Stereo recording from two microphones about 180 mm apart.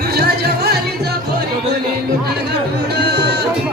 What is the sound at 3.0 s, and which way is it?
Music, 65° right (ahead or behind).